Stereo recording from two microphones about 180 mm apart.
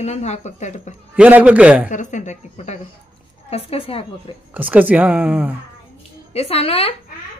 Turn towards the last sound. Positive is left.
turn(degrees=35)  # may be behind; listen again after turning